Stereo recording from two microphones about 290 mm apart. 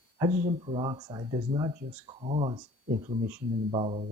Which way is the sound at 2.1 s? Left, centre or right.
Right.